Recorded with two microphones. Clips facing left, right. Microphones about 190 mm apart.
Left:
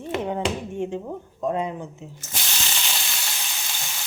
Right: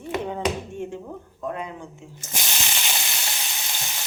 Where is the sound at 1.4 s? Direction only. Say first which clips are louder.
Left 6 dB; 25° left (ahead or behind).